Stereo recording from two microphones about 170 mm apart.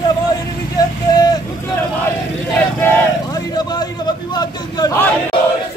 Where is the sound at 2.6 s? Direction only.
10° left (ahead or behind).